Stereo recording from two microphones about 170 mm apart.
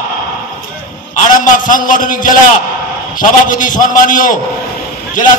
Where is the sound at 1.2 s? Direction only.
50° left (ahead or behind).